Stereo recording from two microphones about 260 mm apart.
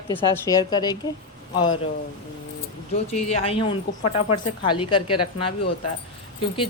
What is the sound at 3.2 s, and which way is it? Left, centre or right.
A woman's voice, left.